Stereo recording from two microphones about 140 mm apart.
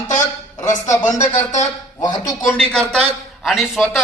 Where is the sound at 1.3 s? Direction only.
55° left (ahead or behind).